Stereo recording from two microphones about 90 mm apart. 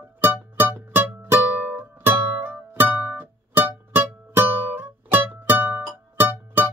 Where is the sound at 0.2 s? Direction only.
25° right (ahead or behind).